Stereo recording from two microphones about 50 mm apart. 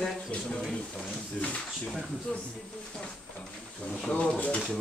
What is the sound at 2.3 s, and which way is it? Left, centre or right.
Speech, centre.